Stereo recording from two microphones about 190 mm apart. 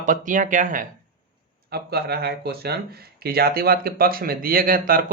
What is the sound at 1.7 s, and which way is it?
Speech, 55° right (ahead or behind).